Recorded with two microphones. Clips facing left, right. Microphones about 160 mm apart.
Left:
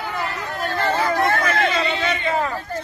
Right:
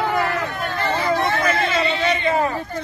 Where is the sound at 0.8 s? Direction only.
45° left (ahead or behind).